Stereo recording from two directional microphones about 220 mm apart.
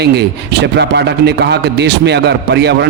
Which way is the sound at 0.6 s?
50° right (ahead or behind).